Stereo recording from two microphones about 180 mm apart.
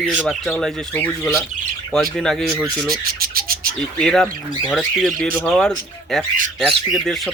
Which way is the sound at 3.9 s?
5° left (ahead or behind).